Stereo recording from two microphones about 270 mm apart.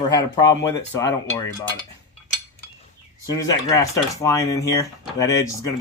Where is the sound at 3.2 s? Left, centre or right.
Centre.